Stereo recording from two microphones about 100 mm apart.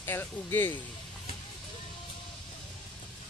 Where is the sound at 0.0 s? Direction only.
20° left (ahead or behind).